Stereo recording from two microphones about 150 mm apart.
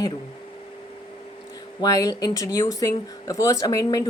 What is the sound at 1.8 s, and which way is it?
Speech, 25° left (ahead or behind).